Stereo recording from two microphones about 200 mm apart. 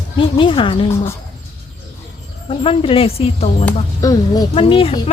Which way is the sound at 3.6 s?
15° left (ahead or behind).